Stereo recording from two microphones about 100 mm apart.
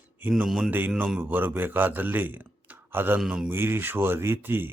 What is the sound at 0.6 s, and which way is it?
Speech, 20° right (ahead or behind).